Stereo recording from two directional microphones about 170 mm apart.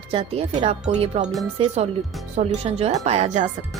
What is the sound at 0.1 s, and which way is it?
Speech, 35° right (ahead or behind).